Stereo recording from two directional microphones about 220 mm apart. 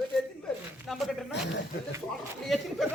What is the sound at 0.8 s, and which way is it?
Speech, centre (ahead or behind).